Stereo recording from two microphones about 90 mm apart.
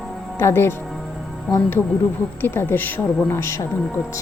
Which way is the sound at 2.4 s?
25° left (ahead or behind).